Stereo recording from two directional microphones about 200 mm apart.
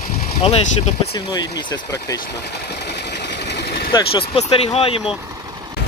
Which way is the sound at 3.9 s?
30° left (ahead or behind).